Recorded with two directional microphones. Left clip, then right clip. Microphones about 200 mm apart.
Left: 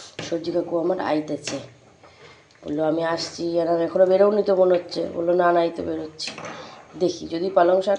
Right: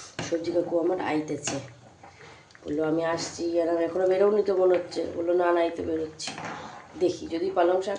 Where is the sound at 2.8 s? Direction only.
15° left (ahead or behind).